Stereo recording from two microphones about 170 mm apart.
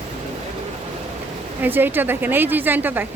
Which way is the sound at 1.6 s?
10° right (ahead or behind).